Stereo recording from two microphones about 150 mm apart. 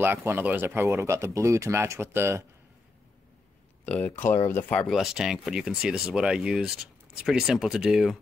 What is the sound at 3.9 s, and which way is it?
Speech, 10° left (ahead or behind).